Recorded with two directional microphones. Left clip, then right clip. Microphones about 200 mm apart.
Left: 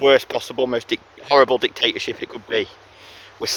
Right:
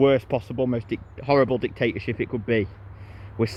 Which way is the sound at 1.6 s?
90° left.